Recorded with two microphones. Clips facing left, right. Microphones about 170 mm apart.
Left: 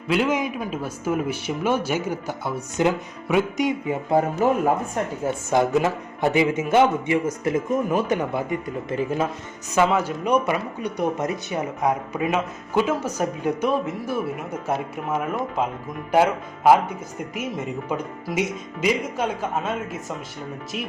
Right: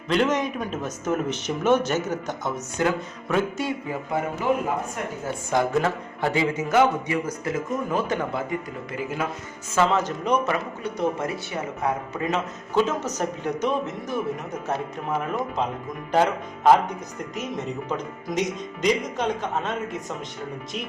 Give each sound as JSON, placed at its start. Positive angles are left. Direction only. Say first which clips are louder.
{"t": 0.1, "sound": "speech", "louder": "even", "side_deg": 5}
{"t": 4.4, "sound": "speech", "louder": "left 1 dB", "side_deg": 45}
{"t": 5.2, "sound": "speech", "louder": "left 3 dB", "side_deg": 20}
{"t": 9.7, "sound": "speech", "louder": "left 2 dB", "side_deg": 10}